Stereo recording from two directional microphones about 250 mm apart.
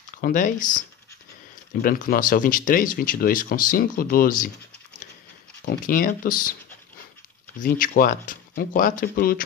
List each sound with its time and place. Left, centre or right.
0.2 s speech: left
1.8 s speech: left
5.7 s speech: left
7.5 s speech: left